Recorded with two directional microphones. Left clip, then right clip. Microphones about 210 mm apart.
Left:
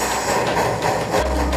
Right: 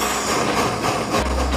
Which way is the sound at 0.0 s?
25° right (ahead or behind).